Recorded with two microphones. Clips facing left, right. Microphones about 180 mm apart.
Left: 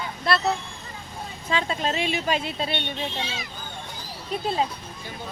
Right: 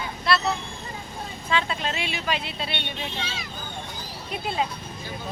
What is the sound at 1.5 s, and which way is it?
A woman's voice, 40° left (ahead or behind).